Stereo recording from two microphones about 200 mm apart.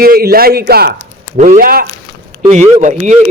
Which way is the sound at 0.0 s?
50° right (ahead or behind).